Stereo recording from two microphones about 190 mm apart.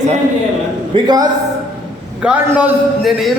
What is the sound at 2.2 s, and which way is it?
A man's voice, 5° right (ahead or behind).